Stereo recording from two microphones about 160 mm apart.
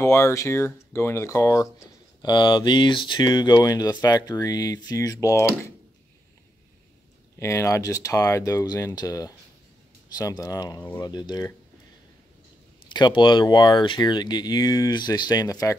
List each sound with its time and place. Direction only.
0.0 s speech: 20° left (ahead or behind)
7.3 s speech: 20° left (ahead or behind)
12.8 s speech: 30° left (ahead or behind)